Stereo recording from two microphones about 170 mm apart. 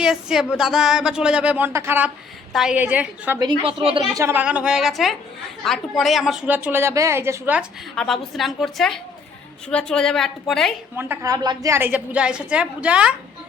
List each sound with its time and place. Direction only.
0.0 s speech: 5° right (ahead or behind)
2.5 s a woman's voice: 5° right (ahead or behind)
3.4 s a woman's voice: 30° right (ahead or behind)
4.2 s a woman's voice: 10° right (ahead or behind)
7.9 s speech: centre (ahead or behind)
10.9 s a woman's voice: 15° right (ahead or behind)